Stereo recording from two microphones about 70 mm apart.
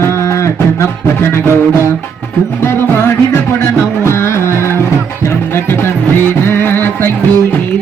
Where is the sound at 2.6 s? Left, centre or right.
Left.